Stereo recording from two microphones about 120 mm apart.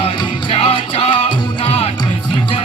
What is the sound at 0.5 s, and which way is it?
Music, 60° left (ahead or behind).